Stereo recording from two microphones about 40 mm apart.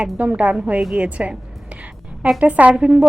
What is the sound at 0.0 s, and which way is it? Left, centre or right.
Speech, right.